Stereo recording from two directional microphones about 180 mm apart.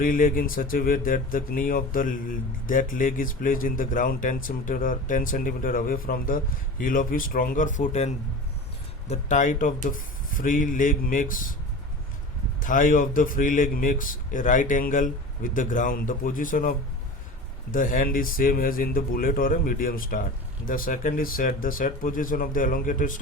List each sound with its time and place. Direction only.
0.0 s speech: 50° left (ahead or behind)
12.5 s speech: 45° left (ahead or behind)